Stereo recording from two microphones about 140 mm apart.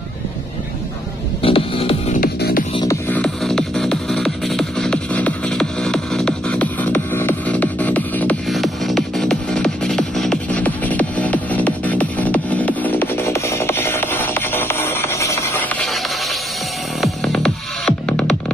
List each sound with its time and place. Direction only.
1.4 s music: 40° left (ahead or behind)
2.1 s music: 90° left
2.8 s music: 20° left (ahead or behind)
3.2 s music: 5° left (ahead or behind)
8.5 s music: centre (ahead or behind); by 15.6 s 20° left (ahead or behind)
17.0 s music: 5° left (ahead or behind)